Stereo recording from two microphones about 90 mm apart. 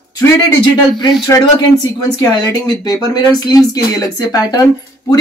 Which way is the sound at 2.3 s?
45° left (ahead or behind).